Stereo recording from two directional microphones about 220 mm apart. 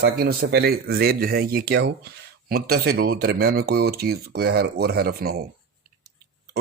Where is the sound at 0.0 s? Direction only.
45° right (ahead or behind).